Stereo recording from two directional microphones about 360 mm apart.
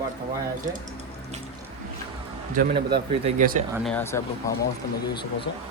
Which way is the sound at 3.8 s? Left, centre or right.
Centre.